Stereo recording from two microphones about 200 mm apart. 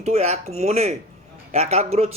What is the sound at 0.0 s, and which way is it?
A man's voice, 35° right (ahead or behind).